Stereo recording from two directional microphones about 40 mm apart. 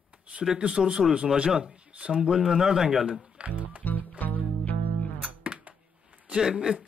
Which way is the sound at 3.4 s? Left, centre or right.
Right.